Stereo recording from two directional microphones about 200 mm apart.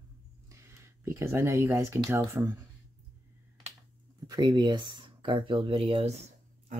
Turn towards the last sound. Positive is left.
turn(degrees=-30)  # may be behind; listen again after turning